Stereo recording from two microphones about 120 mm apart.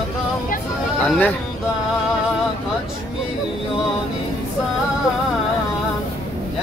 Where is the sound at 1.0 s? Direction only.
10° left (ahead or behind).